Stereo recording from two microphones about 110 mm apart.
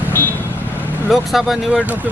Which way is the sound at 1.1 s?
Centre (ahead or behind).